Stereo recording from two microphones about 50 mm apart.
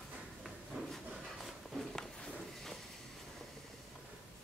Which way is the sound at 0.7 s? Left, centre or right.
Right.